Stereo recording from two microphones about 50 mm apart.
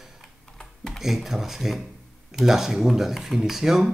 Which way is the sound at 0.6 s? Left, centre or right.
Centre.